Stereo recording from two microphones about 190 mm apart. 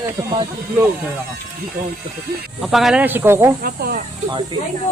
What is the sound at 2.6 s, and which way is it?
Speech, centre (ahead or behind).